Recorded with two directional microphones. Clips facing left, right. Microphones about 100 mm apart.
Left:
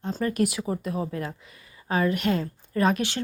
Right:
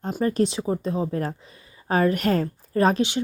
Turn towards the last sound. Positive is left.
turn(degrees=-35)  # may be behind; listen again after turning